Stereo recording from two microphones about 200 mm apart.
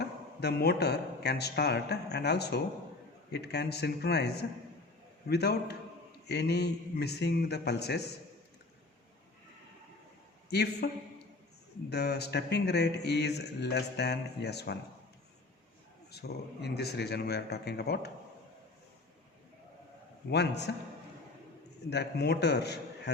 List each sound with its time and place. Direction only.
0.0 s speech: 55° left (ahead or behind)
10.5 s speech: 55° left (ahead or behind)
11.9 s speech: 55° left (ahead or behind)
16.1 s speech: 55° left (ahead or behind)
20.3 s speech: 60° left (ahead or behind)
21.8 s speech: 55° left (ahead or behind)